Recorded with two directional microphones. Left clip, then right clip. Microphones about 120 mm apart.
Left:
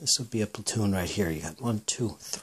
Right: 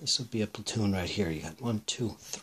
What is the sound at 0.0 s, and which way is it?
Speech, 40° left (ahead or behind).